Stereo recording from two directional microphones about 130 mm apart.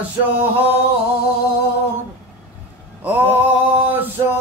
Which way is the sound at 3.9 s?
15° right (ahead or behind).